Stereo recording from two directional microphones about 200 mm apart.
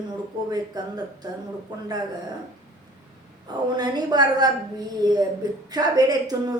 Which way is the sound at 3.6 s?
20° right (ahead or behind).